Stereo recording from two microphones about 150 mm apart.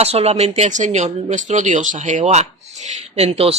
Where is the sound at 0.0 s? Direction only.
45° right (ahead or behind).